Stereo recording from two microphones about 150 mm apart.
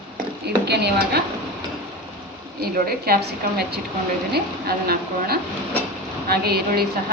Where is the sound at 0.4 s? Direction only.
90° right.